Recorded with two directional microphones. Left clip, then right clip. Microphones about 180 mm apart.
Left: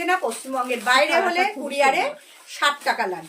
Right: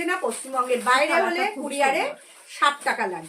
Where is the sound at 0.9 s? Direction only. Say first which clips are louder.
Left 3 dB; 15° right (ahead or behind).